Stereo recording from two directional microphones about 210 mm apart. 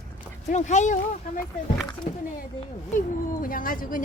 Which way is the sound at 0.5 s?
35° left (ahead or behind).